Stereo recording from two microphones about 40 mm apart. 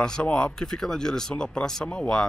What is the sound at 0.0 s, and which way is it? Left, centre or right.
Speech, left.